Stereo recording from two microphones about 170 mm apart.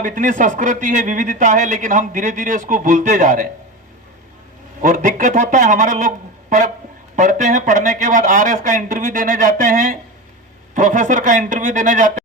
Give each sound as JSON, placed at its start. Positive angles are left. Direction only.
{"t": 0.0, "sound": "speech", "side_deg": -50}
{"t": 4.8, "sound": "speech", "side_deg": -50}